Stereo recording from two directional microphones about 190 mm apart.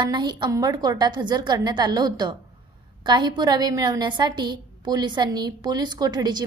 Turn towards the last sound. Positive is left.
turn(degrees=-20)  # may be behind; listen again after turning